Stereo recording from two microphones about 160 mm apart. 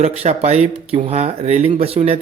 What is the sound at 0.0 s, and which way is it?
Speech, 40° right (ahead or behind).